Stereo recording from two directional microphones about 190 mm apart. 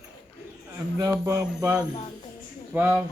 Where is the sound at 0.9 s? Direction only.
15° right (ahead or behind).